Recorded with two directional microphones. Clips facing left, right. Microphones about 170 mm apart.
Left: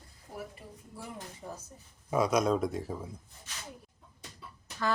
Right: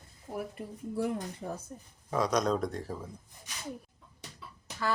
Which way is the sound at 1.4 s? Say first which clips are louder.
Right 1 dB; 60° right (ahead or behind).